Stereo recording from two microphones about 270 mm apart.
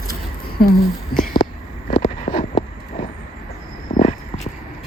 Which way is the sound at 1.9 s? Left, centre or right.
Left.